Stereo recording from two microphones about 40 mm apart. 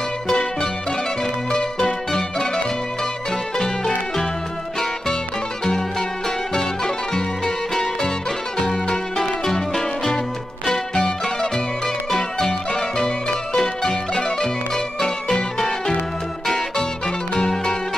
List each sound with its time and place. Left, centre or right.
0.3 s music: centre
6.5 s music: centre
16.4 s music: centre